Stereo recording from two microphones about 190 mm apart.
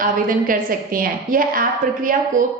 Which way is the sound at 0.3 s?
50° right (ahead or behind).